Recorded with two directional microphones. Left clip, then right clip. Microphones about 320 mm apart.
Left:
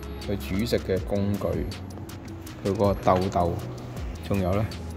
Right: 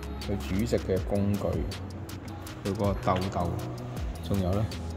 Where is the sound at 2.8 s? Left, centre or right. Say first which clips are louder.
Left 6 dB; centre.